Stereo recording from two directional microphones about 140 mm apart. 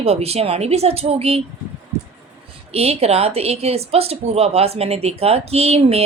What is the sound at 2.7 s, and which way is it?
Speech, 45° right (ahead or behind).